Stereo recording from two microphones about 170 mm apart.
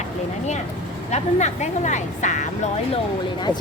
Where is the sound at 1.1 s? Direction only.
40° left (ahead or behind).